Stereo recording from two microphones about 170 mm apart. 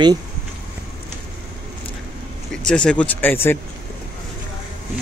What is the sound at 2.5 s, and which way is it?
Speech, 5° left (ahead or behind).